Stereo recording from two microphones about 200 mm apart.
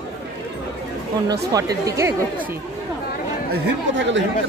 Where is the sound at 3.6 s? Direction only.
65° right (ahead or behind).